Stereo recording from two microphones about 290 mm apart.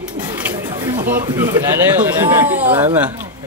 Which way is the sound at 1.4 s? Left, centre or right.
Centre.